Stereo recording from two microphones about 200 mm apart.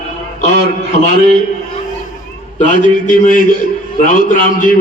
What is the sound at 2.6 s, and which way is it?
Speech, 40° left (ahead or behind).